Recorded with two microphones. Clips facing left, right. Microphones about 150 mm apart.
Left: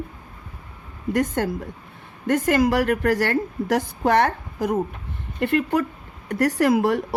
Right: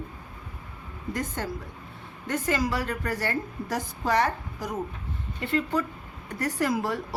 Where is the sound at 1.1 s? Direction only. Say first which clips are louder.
Left 10 dB; 60° left (ahead or behind).